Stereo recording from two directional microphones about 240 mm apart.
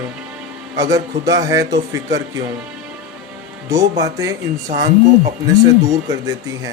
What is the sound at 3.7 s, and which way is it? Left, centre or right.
Speech, centre.